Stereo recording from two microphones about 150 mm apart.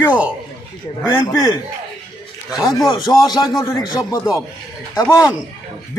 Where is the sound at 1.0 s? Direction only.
25° left (ahead or behind).